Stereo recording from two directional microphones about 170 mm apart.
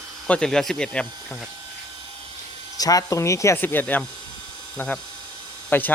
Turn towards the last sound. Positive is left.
turn(degrees=10)  # may be behind; listen again after turning